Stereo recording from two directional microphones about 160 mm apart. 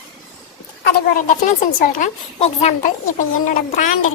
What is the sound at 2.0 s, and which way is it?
Speech, 40° left (ahead or behind).